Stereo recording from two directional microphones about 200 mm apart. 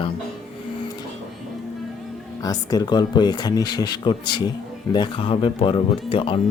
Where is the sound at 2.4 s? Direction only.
20° left (ahead or behind).